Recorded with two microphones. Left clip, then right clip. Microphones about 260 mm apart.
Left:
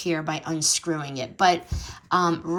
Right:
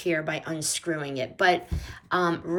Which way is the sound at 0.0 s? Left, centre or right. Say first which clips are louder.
Even; centre.